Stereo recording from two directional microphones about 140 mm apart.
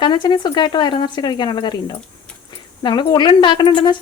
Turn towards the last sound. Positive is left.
turn(degrees=35)  # may be behind; listen again after turning